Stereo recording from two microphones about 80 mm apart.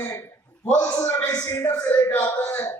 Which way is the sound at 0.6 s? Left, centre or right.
Left.